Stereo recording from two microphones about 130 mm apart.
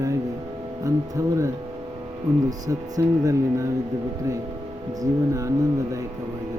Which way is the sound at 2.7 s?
25° right (ahead or behind).